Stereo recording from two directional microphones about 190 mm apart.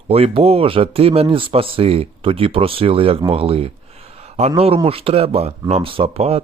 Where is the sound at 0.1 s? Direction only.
30° right (ahead or behind).